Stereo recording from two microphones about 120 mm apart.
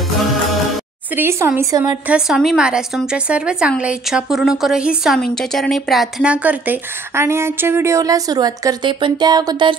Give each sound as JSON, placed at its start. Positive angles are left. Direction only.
{"t": 1.1, "sound": "speech", "side_deg": -20}
{"t": 2.0, "sound": "a woman's voice", "side_deg": -5}
{"t": 9.0, "sound": "a sound", "side_deg": -35}